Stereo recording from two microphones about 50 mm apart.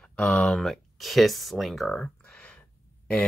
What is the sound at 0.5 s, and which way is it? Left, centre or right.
Speech, centre.